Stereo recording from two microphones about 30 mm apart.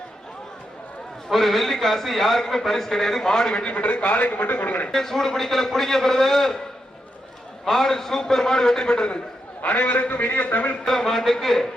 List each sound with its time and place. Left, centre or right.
1.3 s a man's voice: centre
3.7 s a man's voice: left
4.9 s a man's voice: centre
7.6 s a man's voice: centre; by 9.1 s left
9.7 s a man's voice: left
10.8 s a man's voice: centre